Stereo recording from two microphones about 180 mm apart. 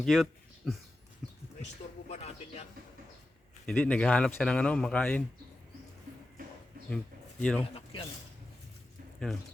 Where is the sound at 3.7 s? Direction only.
5° left (ahead or behind).